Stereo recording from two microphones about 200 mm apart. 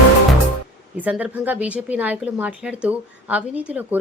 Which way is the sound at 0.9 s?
10° right (ahead or behind).